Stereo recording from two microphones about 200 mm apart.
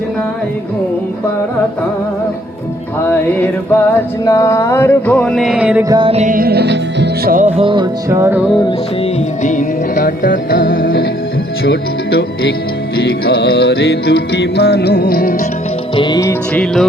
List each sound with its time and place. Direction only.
3.0 s mantra: 10° left (ahead or behind); by 5.8 s 5° right (ahead or behind)
5.9 s music: 25° right (ahead or behind); by 7.3 s 55° right (ahead or behind)
7.3 s music: 30° right (ahead or behind); by 8.4 s 10° right (ahead or behind)
9.4 s music: 40° left (ahead or behind)
11.6 s speech: 55° left (ahead or behind)
13.0 s music: 55° left (ahead or behind)
16.0 s music: 20° left (ahead or behind)